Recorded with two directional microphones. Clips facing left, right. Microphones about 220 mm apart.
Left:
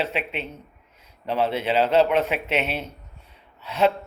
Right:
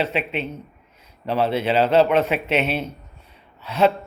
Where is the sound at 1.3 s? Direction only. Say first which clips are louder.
Right 3 dB; 15° left (ahead or behind).